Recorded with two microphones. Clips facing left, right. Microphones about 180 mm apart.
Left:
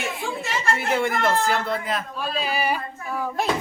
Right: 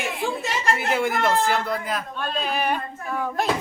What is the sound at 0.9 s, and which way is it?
Speech, centre (ahead or behind).